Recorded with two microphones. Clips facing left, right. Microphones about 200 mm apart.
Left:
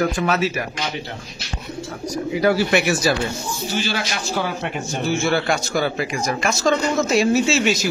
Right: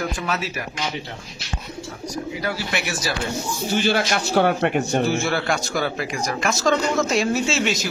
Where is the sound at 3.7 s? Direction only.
55° right (ahead or behind).